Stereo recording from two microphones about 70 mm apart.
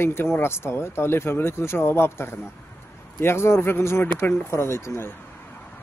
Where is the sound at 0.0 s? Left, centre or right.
Left.